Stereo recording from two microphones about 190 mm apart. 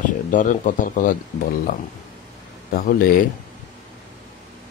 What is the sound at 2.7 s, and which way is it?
Speech, 50° left (ahead or behind).